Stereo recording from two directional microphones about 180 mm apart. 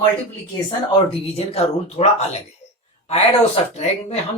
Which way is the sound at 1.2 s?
35° left (ahead or behind).